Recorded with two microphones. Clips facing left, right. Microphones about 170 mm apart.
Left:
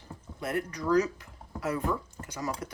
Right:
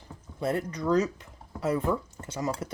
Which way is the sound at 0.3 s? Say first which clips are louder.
Right 3 dB; 25° right (ahead or behind).